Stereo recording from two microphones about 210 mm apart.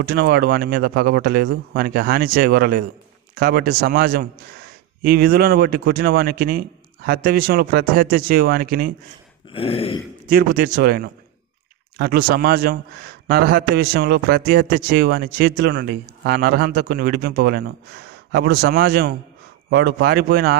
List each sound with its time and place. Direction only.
0.0 s a man's voice: 50° right (ahead or behind)
9.5 s a sound: 25° left (ahead or behind)
10.3 s a man's voice: 45° right (ahead or behind)